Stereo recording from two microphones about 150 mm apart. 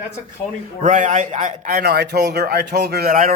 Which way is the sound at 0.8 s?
55° right (ahead or behind).